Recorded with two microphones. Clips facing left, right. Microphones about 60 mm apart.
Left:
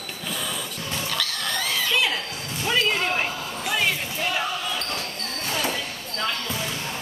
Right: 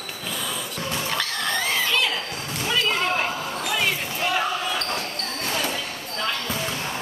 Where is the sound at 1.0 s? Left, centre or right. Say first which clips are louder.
Right 2 dB; right.